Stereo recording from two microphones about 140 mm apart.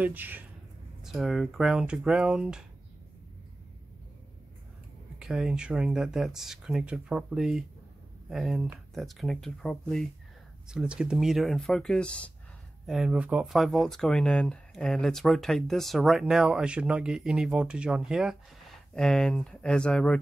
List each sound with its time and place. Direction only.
0.0 s speech: 15° right (ahead or behind)
1.0 s speech: centre (ahead or behind)
5.2 s speech: 5° right (ahead or behind)
12.8 s speech: 5° right (ahead or behind)